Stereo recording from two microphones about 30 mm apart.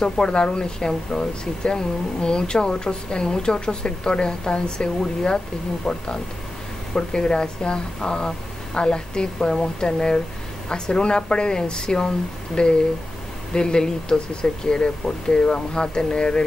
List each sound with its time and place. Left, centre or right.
0.0 s speech: left
5.9 s speech: centre
6.9 s speech: left